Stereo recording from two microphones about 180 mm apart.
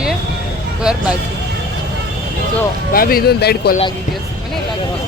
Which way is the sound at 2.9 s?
55° left (ahead or behind).